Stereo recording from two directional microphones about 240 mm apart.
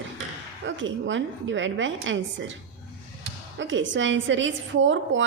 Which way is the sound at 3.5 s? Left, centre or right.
Right.